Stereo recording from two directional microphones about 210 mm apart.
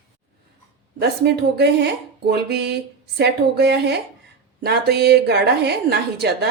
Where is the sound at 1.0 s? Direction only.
50° right (ahead or behind).